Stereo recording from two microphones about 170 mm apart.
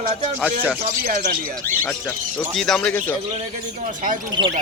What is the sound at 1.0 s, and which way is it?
Speech, 45° right (ahead or behind).